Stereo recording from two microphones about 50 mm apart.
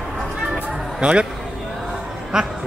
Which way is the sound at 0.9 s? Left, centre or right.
Right.